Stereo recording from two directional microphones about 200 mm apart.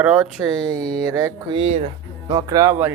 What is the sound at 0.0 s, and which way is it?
Music, 5° right (ahead or behind).